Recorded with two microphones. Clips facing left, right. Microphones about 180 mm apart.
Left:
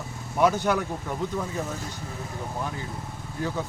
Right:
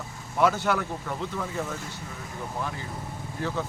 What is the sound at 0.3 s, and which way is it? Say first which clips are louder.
Speech: left 1 dB; 15° left (ahead or behind).